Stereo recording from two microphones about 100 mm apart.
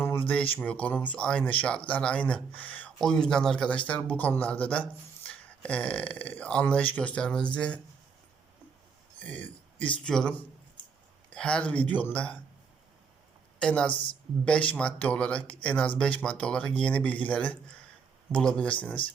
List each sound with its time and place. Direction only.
0.0 s speech: 20° left (ahead or behind)
9.1 s speech: 15° left (ahead or behind)
13.6 s speech: 10° left (ahead or behind)
13.9 s speech: 60° left (ahead or behind)
14.4 s speech: 10° left (ahead or behind)